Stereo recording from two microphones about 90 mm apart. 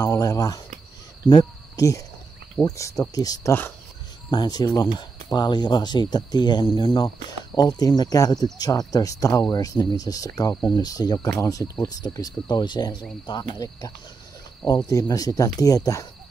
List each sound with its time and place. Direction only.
0.0 s speech: 35° left (ahead or behind)
1.8 s speech: 35° left (ahead or behind)
4.3 s speech: 50° left (ahead or behind); by 7.1 s 70° left (ahead or behind)
7.5 s speech: 45° left (ahead or behind)